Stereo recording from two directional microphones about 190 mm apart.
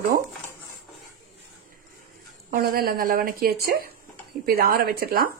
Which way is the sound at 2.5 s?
50° right (ahead or behind).